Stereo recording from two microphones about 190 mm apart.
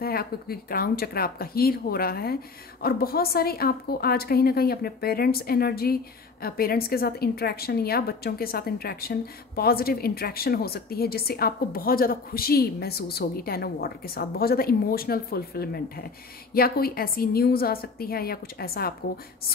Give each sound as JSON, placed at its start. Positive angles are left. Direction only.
{"t": 0.0, "sound": "a woman's voice", "side_deg": 55}